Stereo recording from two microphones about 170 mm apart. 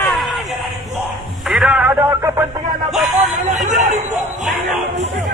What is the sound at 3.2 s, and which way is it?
Hubbub, 40° right (ahead or behind).